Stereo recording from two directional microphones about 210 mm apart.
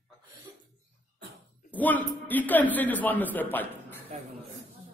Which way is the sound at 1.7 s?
10° left (ahead or behind).